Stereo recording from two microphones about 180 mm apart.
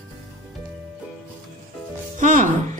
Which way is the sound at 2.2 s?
45° right (ahead or behind).